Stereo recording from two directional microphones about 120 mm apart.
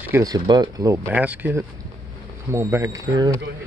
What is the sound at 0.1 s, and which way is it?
Speech, 30° right (ahead or behind).